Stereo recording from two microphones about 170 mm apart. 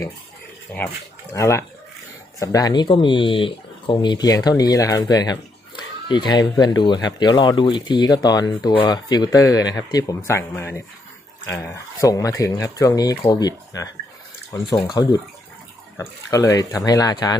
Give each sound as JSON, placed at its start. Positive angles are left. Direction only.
{"t": 1.3, "sound": "speech", "side_deg": 15}